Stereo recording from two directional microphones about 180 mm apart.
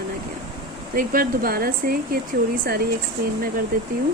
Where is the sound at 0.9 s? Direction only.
50° right (ahead or behind).